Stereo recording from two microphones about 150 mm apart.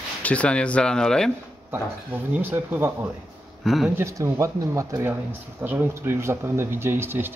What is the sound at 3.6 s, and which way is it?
Speech, centre (ahead or behind).